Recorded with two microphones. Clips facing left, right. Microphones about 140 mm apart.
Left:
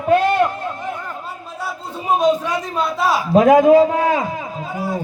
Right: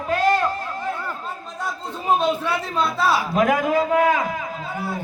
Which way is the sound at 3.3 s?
25° left (ahead or behind).